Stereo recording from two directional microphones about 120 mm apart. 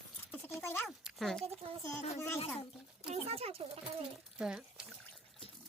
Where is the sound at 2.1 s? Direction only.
20° left (ahead or behind).